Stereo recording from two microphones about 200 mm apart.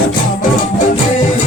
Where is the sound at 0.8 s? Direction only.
40° left (ahead or behind).